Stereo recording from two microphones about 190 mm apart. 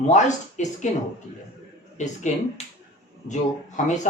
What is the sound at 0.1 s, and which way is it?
Speech, 40° left (ahead or behind).